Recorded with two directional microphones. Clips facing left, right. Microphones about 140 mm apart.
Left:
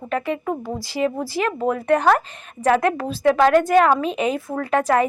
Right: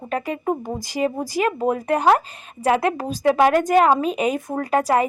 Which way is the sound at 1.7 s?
35° right (ahead or behind).